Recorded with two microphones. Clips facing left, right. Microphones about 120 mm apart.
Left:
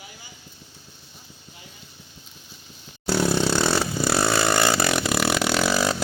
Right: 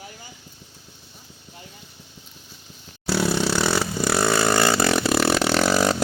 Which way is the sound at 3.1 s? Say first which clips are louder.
Even; 15° left (ahead or behind).